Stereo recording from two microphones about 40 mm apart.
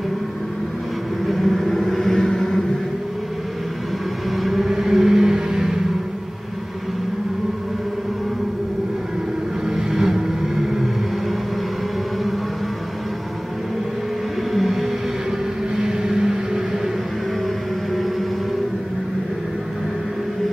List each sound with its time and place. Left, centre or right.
1.2 s vehicle: centre
4.4 s vehicle: centre
9.7 s vehicle: centre
14.5 s vehicle: centre
15.8 s vehicle: centre